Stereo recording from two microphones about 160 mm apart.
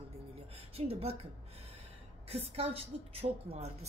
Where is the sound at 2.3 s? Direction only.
40° right (ahead or behind).